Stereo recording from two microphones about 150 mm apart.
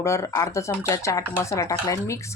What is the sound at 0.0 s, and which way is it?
Speech, 20° left (ahead or behind).